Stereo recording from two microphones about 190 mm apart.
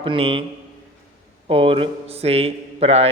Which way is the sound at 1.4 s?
30° right (ahead or behind).